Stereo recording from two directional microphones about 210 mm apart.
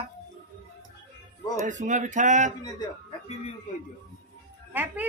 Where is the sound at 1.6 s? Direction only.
35° right (ahead or behind).